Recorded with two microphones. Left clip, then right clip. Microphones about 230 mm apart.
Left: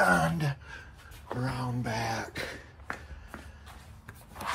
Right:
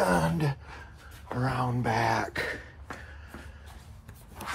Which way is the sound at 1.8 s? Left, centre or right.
Right.